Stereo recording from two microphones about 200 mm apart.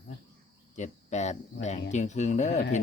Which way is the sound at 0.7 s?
35° left (ahead or behind).